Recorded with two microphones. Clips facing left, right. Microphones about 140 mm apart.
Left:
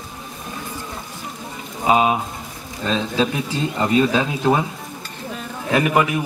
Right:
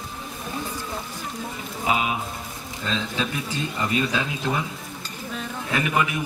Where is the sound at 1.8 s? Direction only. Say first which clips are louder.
Left 8 dB; 35° left (ahead or behind).